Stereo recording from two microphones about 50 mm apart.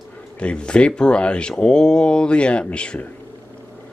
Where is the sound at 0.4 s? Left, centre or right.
Left.